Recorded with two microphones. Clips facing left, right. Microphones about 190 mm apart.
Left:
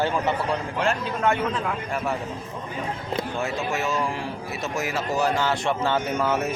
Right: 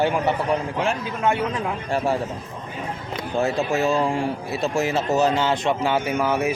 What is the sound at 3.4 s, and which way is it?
Speech, 35° right (ahead or behind).